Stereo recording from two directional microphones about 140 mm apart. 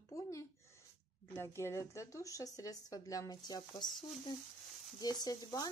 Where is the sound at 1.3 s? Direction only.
20° left (ahead or behind).